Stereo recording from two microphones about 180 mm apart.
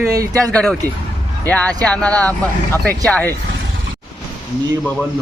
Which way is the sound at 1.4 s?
10° left (ahead or behind).